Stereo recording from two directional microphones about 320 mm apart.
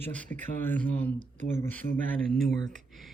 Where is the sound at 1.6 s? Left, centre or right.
Centre.